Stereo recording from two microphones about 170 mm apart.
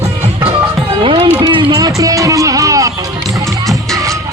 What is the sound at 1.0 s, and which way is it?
Music, 30° right (ahead or behind).